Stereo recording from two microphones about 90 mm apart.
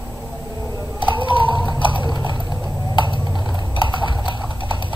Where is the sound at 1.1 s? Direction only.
65° right (ahead or behind).